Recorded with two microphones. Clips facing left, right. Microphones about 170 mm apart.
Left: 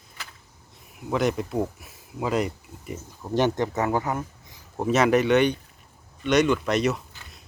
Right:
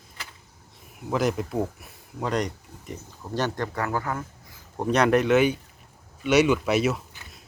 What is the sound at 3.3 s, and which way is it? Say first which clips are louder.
Speech: left 5 dB; 20° left (ahead or behind).